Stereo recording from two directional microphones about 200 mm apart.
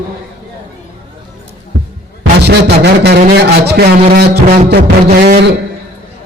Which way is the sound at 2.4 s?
55° right (ahead or behind).